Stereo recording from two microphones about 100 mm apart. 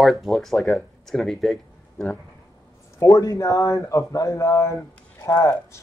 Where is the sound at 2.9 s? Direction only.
35° left (ahead or behind).